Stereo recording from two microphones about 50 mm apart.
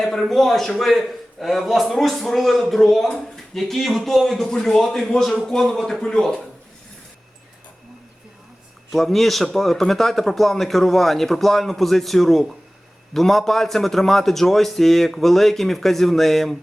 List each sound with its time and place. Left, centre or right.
0.0 s a man's voice: centre
8.9 s a man's voice: centre